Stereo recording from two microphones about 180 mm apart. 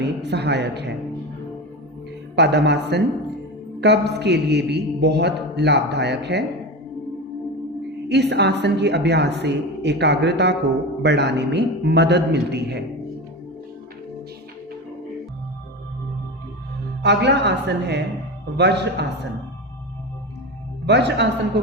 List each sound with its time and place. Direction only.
0.0 s a woman's voice: 70° right (ahead or behind)
2.3 s a man's voice: 70° right (ahead or behind)
8.1 s a man's voice: 70° right (ahead or behind)
17.0 s a man's voice: 70° right (ahead or behind)
20.8 s a man's voice: 70° right (ahead or behind)